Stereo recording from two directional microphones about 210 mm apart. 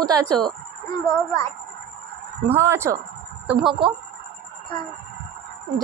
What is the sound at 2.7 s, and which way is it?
Speech, 10° right (ahead or behind).